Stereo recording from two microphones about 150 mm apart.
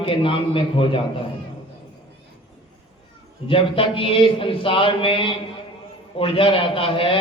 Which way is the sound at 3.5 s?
35° left (ahead or behind).